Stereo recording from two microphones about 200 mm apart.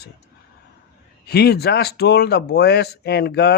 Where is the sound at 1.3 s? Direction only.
55° left (ahead or behind).